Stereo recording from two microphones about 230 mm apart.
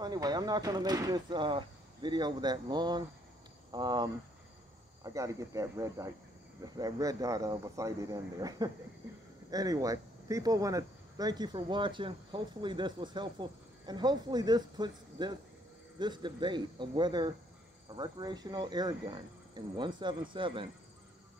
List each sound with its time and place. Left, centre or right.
0.0 s speech: centre